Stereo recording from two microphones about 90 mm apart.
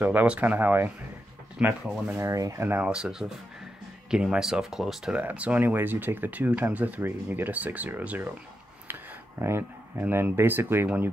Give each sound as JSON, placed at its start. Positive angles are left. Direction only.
{"t": 0.0, "sound": "speech", "side_deg": -20}
{"t": 2.1, "sound": "speech", "side_deg": -35}
{"t": 2.8, "sound": "speech", "side_deg": -10}
{"t": 9.4, "sound": "speech", "side_deg": -25}